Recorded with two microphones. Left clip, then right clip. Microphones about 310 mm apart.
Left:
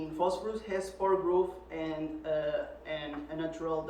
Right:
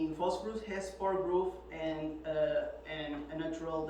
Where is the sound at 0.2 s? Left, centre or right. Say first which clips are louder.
Left 8 dB; centre.